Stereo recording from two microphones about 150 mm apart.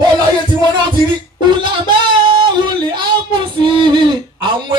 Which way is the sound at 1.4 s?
30° right (ahead or behind).